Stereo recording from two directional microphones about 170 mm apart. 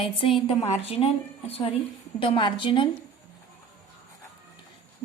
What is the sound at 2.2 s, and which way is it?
Speech, 30° left (ahead or behind).